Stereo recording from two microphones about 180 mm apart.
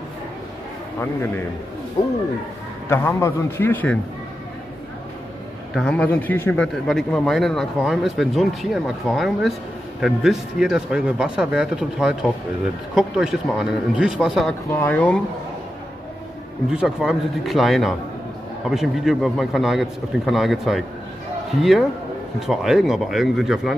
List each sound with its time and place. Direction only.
0.9 s a man's voice: 10° left (ahead or behind)
2.0 s speech: 25° left (ahead or behind)
2.9 s a man's voice: 15° left (ahead or behind)
5.8 s speech: 5° left (ahead or behind)
14.7 s a man's voice: 10° left (ahead or behind)
16.7 s speech: 5° right (ahead or behind)